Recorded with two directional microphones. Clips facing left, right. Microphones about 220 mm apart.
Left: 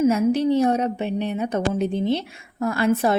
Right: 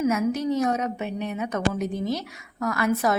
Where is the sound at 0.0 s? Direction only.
30° left (ahead or behind).